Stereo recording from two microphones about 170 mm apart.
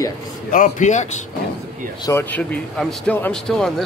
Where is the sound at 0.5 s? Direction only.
50° left (ahead or behind).